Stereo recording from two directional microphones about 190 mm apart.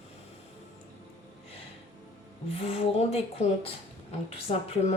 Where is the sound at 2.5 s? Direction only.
30° left (ahead or behind).